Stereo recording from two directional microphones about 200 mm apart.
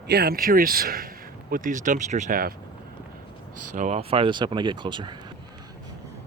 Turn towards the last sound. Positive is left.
turn(degrees=-25)  # may be behind; listen again after turning